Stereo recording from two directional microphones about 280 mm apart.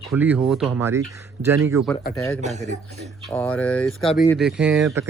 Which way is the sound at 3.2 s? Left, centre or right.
Centre.